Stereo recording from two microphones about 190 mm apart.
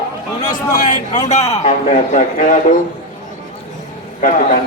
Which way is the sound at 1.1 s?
40° left (ahead or behind).